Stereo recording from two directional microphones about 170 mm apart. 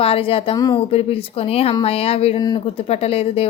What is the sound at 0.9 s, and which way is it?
Speech, 35° left (ahead or behind).